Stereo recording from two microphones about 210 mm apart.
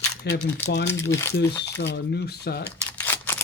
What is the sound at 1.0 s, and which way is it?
Speech, 15° left (ahead or behind).